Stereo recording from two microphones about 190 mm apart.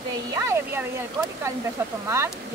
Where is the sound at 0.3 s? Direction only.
15° right (ahead or behind).